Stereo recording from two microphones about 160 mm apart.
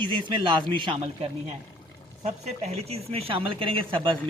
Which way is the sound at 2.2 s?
45° right (ahead or behind).